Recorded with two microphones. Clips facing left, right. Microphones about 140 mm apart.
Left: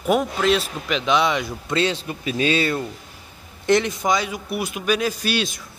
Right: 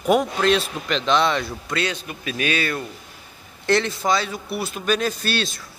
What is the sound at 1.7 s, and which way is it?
A man's voice, 25° left (ahead or behind).